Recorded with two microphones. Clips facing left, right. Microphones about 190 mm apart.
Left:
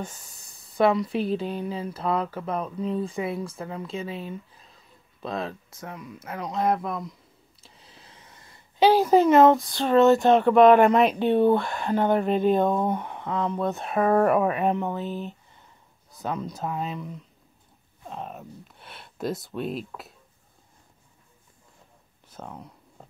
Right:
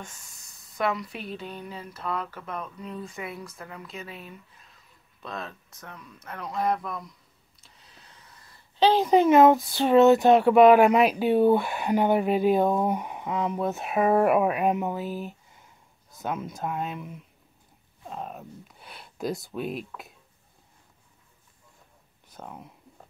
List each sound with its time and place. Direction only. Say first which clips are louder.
0.0 s speech: left 8 dB; 35° left (ahead or behind)
7.6 s a sound: left 3 dB; 30° left (ahead or behind)
8.7 s speech: left 2 dB; 10° left (ahead or behind)
22.3 s speech: left 2 dB; centre (ahead or behind)